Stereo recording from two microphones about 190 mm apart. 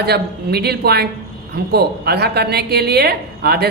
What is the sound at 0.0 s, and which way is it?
Speech, 55° right (ahead or behind).